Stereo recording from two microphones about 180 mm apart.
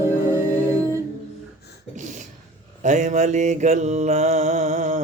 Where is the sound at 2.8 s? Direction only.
40° right (ahead or behind).